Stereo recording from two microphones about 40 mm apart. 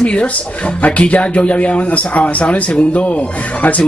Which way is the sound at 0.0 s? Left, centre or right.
Left.